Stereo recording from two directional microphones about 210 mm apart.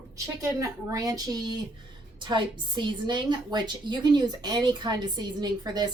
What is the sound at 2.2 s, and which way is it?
Speech, 20° right (ahead or behind).